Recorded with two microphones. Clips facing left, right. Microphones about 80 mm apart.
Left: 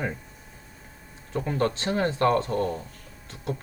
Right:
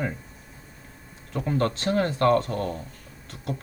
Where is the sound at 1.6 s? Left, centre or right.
Centre.